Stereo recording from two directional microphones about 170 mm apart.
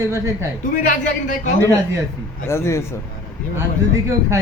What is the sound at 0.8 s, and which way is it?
Speech, 50° left (ahead or behind).